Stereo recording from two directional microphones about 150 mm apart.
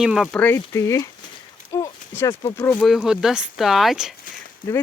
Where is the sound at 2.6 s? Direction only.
5° left (ahead or behind).